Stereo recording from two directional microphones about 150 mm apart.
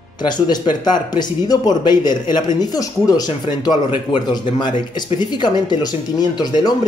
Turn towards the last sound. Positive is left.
turn(degrees=30)  # may be behind; listen again after turning